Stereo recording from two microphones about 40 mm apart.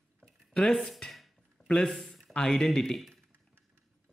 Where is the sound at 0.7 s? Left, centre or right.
Centre.